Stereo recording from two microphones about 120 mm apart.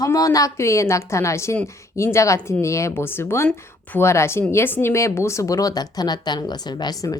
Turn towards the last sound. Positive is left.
turn(degrees=30)  # may be behind; listen again after turning